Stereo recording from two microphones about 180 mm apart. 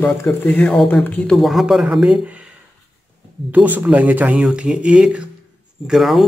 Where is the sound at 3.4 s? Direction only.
10° right (ahead or behind).